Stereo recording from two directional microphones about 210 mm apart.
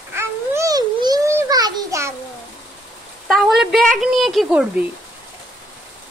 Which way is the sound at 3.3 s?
Centre (ahead or behind).